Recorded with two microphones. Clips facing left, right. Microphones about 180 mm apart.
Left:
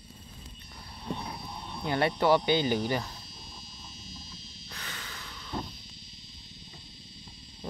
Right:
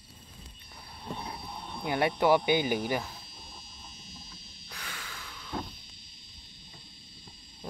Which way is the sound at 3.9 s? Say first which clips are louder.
Left 5 dB; 55° right (ahead or behind).